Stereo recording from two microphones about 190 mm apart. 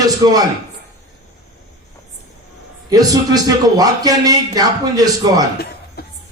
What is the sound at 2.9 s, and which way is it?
A man's voice, 20° right (ahead or behind).